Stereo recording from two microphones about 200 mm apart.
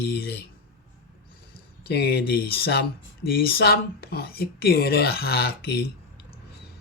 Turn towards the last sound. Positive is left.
turn(degrees=50)  # may be behind; listen again after turning